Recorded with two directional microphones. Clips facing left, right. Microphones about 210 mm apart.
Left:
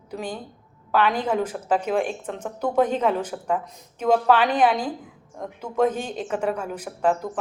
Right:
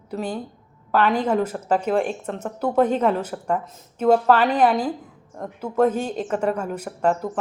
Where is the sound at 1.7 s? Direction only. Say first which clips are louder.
Right 2 dB; 10° left (ahead or behind).